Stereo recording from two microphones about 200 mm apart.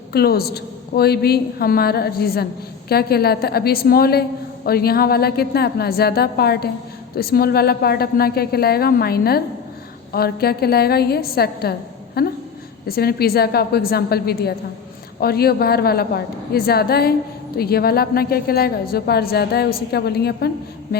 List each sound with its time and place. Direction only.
0.1 s a woman's voice: 50° left (ahead or behind)